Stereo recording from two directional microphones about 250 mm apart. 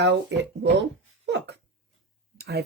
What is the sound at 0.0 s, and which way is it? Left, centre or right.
Speech, right.